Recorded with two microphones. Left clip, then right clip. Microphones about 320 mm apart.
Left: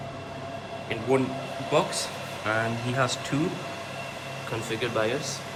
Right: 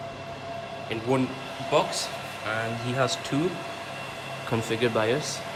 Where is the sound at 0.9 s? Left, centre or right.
Centre.